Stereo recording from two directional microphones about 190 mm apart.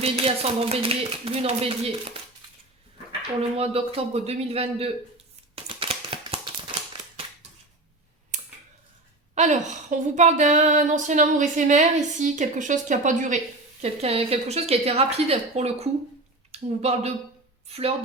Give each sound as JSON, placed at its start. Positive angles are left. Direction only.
{"t": 0.0, "sound": "speech", "side_deg": -30}
{"t": 3.6, "sound": "speech", "side_deg": -30}
{"t": 5.6, "sound": "a sound", "side_deg": -30}
{"t": 8.3, "sound": "clicking", "side_deg": -40}
{"t": 9.3, "sound": "speech", "side_deg": -40}